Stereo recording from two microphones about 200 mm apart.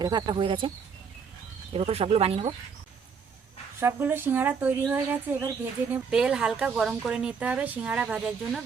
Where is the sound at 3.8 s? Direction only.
10° right (ahead or behind).